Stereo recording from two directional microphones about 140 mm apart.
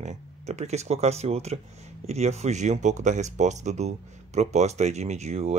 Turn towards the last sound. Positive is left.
turn(degrees=-50)  # may be behind; listen again after turning